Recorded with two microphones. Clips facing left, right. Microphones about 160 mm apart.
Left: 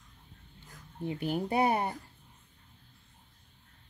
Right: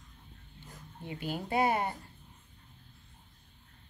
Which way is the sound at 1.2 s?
15° left (ahead or behind).